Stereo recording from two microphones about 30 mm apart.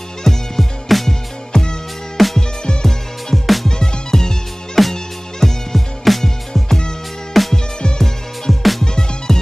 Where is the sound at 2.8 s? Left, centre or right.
Centre.